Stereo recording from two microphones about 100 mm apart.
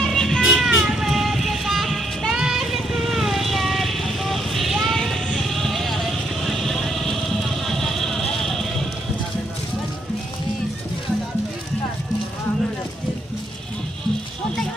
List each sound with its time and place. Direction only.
0.0 s music: 5° left (ahead or behind)
6.4 s vehicle: centre (ahead or behind)